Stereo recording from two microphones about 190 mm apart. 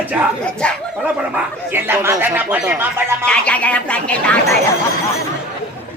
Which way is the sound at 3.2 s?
5° left (ahead or behind).